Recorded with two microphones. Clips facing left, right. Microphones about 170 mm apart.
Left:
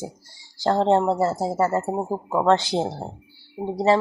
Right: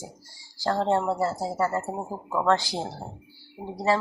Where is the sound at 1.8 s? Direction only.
35° left (ahead or behind).